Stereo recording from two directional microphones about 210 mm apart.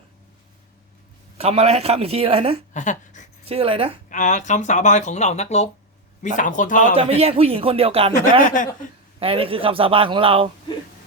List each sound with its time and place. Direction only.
1.4 s a man's voice: 30° right (ahead or behind)
2.7 s speech: 35° left (ahead or behind)
3.4 s a man's voice: 25° right (ahead or behind)
4.1 s speech: 35° left (ahead or behind)
6.9 s a man's voice: 30° right (ahead or behind)
8.4 s speech: 35° left (ahead or behind)
9.2 s a man's voice: 25° right (ahead or behind)